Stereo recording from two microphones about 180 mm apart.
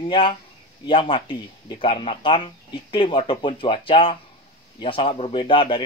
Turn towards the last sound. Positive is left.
turn(degrees=30)  # may be behind; listen again after turning